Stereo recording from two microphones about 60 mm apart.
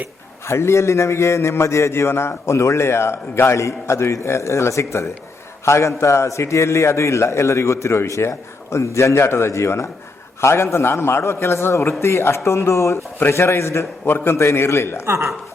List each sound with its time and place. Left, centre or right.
0.4 s a man's voice: left
14.0 s a man's voice: left
14.3 s a man's voice: left
15.0 s speech: right